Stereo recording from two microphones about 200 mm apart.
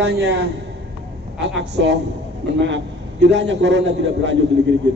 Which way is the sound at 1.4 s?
65° right (ahead or behind).